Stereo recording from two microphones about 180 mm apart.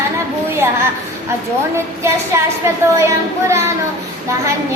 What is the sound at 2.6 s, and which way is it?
A woman's voice, 15° right (ahead or behind).